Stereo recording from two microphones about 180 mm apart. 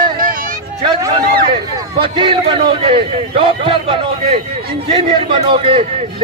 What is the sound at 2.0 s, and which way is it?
A man's voice, 30° right (ahead or behind).